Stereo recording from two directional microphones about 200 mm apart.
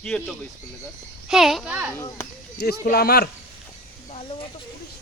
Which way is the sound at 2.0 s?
15° left (ahead or behind).